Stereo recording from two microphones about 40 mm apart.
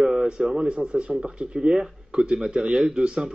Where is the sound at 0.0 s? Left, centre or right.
Centre.